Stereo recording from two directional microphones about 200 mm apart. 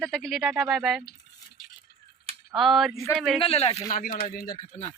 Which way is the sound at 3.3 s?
30° left (ahead or behind).